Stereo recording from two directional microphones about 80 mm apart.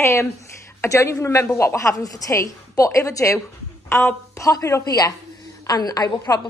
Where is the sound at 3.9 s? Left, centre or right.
Left.